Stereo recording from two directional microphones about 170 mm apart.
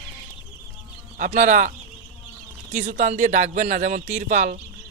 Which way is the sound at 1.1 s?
50° right (ahead or behind).